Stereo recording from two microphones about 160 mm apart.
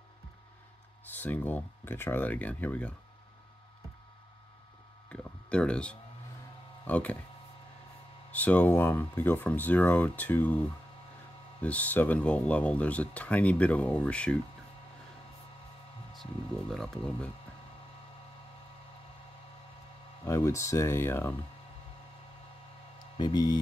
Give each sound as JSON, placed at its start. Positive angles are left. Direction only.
{"t": 1.1, "sound": "speech", "side_deg": 10}
{"t": 5.1, "sound": "a sound", "side_deg": 5}
{"t": 6.8, "sound": "speech", "side_deg": 10}
{"t": 8.3, "sound": "speech", "side_deg": 10}
{"t": 11.6, "sound": "speech", "side_deg": 10}
{"t": 16.2, "sound": "speech", "side_deg": 0}
{"t": 20.2, "sound": "speech", "side_deg": 20}
{"t": 23.1, "sound": "speech", "side_deg": 25}